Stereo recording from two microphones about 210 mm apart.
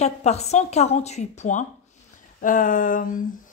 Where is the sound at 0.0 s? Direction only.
30° left (ahead or behind).